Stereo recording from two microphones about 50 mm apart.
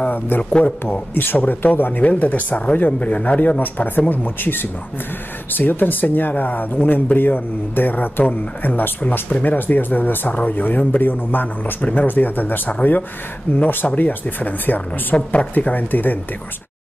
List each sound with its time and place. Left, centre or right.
0.4 s a man's voice: left
1.1 s speech: left